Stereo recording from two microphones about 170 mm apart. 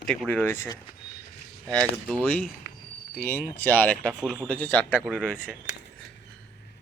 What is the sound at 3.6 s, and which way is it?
Speech, 10° left (ahead or behind).